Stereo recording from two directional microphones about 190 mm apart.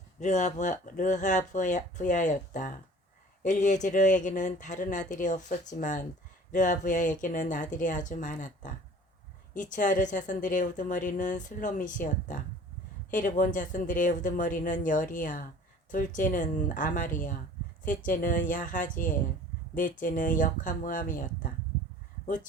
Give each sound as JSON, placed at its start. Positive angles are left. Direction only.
{"t": 0.2, "sound": "speech", "side_deg": 40}